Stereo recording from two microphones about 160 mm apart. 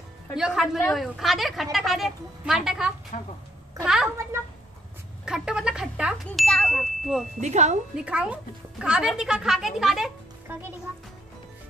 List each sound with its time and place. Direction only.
0.4 s a woman's voice: centre (ahead or behind)
3.1 s a woman's voice: 50° left (ahead or behind)
3.8 s a woman's voice: 5° right (ahead or behind)
5.2 s a woman's voice: 5° right (ahead or behind)
7.3 s speech: 45° right (ahead or behind)
7.9 s a woman's voice: 5° right (ahead or behind)
10.5 s a child's voice: 15° right (ahead or behind)